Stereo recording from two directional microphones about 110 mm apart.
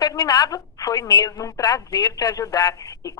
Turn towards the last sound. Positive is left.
turn(degrees=35)  # may be behind; listen again after turning